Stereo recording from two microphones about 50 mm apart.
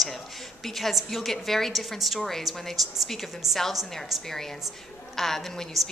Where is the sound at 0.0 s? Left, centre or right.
Centre.